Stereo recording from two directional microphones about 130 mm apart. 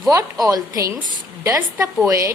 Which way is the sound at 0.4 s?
25° right (ahead or behind).